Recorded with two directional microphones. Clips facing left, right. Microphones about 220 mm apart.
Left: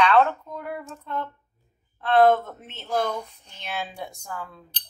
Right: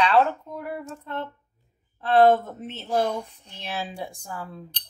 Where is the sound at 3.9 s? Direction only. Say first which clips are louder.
Right 2 dB; 30° right (ahead or behind).